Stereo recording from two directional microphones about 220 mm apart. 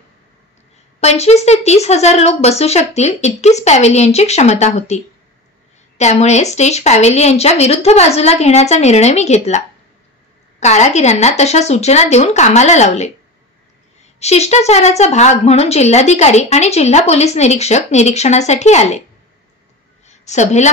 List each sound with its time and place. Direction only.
1.0 s a woman's voice: 30° left (ahead or behind)
14.2 s a woman's voice: 30° left (ahead or behind)
20.1 s a woman's voice: 30° left (ahead or behind)